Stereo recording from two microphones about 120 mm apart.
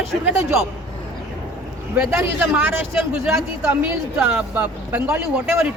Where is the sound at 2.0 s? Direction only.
20° right (ahead or behind).